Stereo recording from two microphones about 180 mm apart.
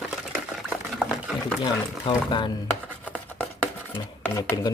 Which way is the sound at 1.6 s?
25° left (ahead or behind).